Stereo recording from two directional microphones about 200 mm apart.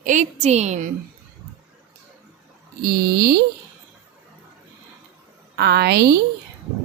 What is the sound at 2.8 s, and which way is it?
Speech, 50° right (ahead or behind).